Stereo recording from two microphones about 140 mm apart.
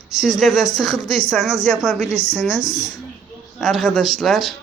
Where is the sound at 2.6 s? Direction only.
25° left (ahead or behind).